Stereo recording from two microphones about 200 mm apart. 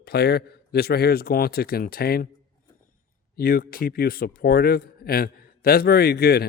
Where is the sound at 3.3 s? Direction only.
45° left (ahead or behind).